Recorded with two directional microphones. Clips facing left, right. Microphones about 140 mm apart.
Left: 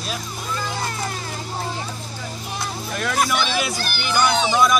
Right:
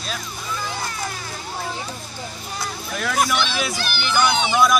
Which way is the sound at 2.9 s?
Centre (ahead or behind).